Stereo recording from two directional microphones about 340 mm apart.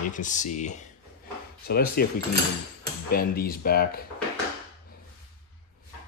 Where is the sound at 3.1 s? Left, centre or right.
Left.